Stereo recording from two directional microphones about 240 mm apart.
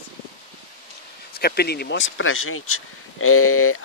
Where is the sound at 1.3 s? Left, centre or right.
Left.